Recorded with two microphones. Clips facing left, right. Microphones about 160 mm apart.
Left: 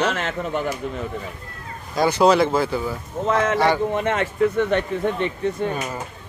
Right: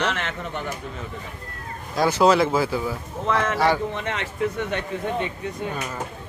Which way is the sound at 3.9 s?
50° left (ahead or behind).